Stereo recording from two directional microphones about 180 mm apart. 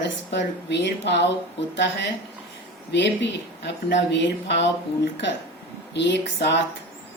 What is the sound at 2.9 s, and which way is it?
Speech, 75° left (ahead or behind).